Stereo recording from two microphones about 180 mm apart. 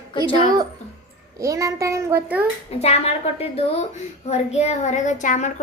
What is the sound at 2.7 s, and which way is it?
A woman's voice, 35° left (ahead or behind).